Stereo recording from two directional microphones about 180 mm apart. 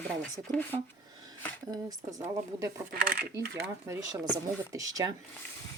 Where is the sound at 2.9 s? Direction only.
55° right (ahead or behind).